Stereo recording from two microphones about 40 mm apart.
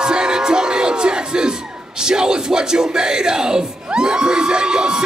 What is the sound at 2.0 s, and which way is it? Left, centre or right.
Music, centre.